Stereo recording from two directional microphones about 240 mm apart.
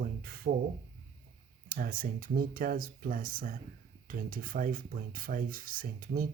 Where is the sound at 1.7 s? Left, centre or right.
Right.